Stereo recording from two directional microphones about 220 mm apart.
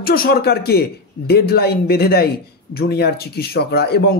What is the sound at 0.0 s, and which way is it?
Speech, 45° left (ahead or behind).